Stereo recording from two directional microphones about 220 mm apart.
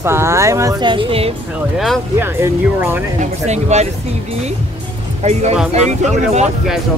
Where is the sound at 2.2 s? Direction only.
10° right (ahead or behind).